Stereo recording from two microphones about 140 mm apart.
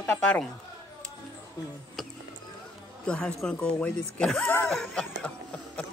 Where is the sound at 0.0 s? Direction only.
10° left (ahead or behind).